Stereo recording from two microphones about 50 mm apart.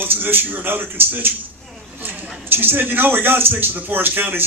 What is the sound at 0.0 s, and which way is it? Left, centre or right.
A man's voice, right.